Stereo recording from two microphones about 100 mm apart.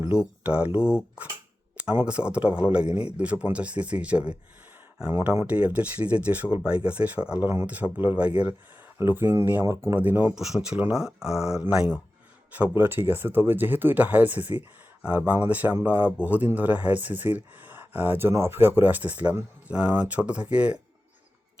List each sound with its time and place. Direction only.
0.1 s speech: 10° right (ahead or behind)
1.7 s a sound: 10° right (ahead or behind)
2.0 s speech: 10° right (ahead or behind)
10.3 s speech: 5° right (ahead or behind)